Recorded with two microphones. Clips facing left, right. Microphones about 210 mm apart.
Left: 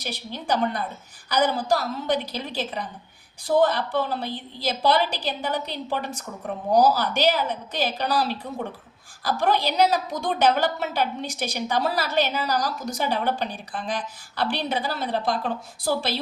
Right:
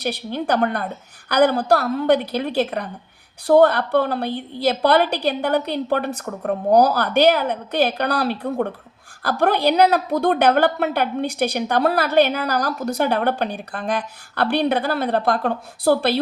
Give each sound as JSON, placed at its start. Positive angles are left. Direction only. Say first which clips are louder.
{"t": 0.0, "sound": "a woman's voice", "louder": "right 9 dB", "side_deg": -60}